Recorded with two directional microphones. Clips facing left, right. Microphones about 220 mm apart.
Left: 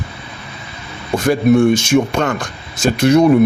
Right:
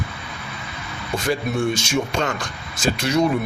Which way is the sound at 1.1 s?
55° left (ahead or behind).